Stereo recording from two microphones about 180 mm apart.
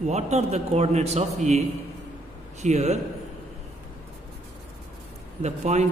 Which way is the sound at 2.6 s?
40° right (ahead or behind).